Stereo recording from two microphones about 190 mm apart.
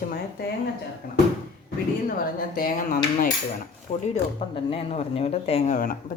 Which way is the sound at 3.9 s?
35° left (ahead or behind).